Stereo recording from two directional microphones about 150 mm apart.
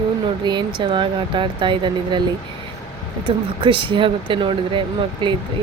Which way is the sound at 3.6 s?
35° right (ahead or behind).